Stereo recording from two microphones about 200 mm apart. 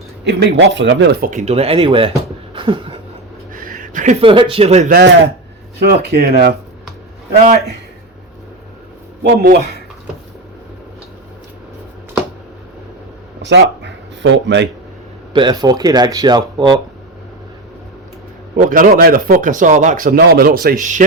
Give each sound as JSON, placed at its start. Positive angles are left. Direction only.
{"t": 0.3, "sound": "speech", "side_deg": -60}
{"t": 2.6, "sound": "a sound", "side_deg": -25}
{"t": 3.5, "sound": "speech", "side_deg": -45}
{"t": 4.9, "sound": "a man's voice", "side_deg": -55}
{"t": 9.2, "sound": "speech", "side_deg": -50}
{"t": 13.4, "sound": "speech", "side_deg": -60}
{"t": 15.3, "sound": "speech", "side_deg": -20}
{"t": 18.5, "sound": "speech", "side_deg": -40}